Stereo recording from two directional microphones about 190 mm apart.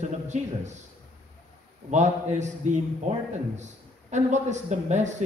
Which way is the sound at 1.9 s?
40° right (ahead or behind).